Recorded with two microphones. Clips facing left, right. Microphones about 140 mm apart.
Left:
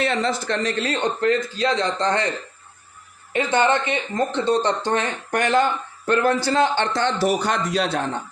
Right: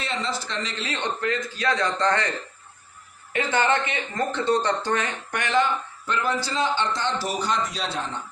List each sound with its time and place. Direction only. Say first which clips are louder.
0.0 s a man's voice: left 7 dB; 60° left (ahead or behind); by 2.3 s 20° left (ahead or behind)
3.3 s speech: left 3 dB; 20° left (ahead or behind)
5.3 s a man's voice: left 4 dB; 40° left (ahead or behind)
6.1 s a man's voice: left 7 dB; 60° left (ahead or behind)